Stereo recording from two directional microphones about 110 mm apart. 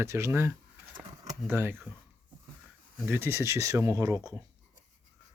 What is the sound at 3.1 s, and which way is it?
Speech, 20° right (ahead or behind).